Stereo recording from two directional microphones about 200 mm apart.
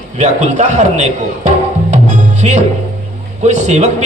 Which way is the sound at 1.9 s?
35° right (ahead or behind).